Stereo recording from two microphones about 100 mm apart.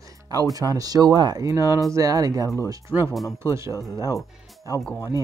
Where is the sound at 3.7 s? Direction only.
35° left (ahead or behind).